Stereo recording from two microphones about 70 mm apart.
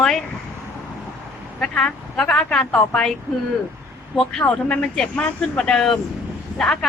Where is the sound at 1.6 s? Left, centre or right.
Centre.